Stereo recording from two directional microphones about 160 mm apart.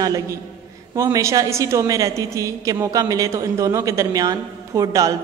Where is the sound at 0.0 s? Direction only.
25° right (ahead or behind).